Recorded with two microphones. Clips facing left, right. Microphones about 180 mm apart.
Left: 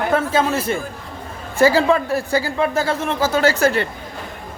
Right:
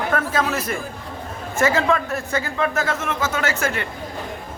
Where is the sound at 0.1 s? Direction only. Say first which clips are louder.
Left 5 dB; 25° left (ahead or behind).